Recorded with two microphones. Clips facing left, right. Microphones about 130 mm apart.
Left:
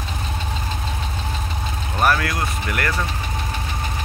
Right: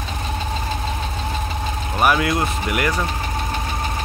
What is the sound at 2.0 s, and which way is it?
Vehicle, 10° right (ahead or behind).